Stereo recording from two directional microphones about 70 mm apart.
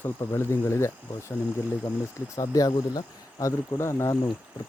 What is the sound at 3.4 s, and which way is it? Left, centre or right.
Speech, left.